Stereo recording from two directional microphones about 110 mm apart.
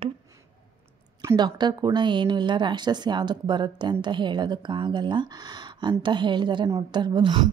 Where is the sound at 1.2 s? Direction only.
35° right (ahead or behind).